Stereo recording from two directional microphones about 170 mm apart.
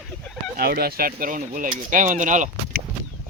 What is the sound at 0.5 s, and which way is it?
Speech, 65° right (ahead or behind).